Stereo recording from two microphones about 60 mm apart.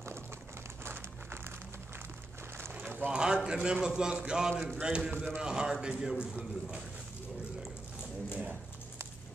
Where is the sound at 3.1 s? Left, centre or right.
Centre.